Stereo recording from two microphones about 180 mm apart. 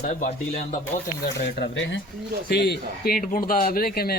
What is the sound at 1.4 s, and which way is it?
Speech, 70° left (ahead or behind).